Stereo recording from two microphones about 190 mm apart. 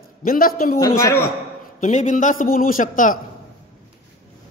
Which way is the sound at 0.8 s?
15° left (ahead or behind).